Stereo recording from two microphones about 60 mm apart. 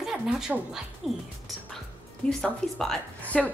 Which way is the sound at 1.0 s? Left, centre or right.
Centre.